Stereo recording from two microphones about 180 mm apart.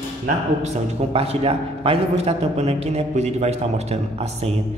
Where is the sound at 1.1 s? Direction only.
35° right (ahead or behind).